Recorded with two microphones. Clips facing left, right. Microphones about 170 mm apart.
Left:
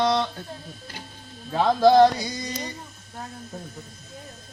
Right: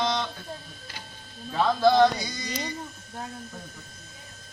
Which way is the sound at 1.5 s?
35° left (ahead or behind).